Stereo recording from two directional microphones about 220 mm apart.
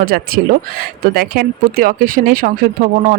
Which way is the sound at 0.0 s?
40° right (ahead or behind).